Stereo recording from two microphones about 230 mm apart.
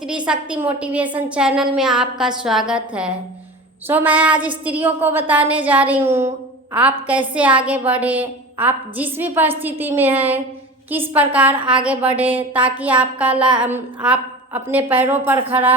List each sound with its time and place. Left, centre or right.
0.3 s a woman's voice: centre